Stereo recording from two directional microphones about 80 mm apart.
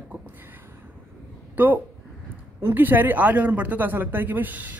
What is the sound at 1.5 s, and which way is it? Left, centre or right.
Speech, right.